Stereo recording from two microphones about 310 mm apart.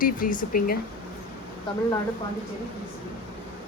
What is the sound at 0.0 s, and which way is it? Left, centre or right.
Speech, left.